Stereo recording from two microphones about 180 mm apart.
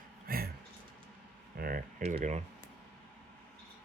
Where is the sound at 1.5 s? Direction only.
55° right (ahead or behind).